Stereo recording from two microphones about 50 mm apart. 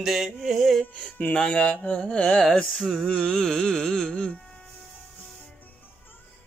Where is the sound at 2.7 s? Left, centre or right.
Centre.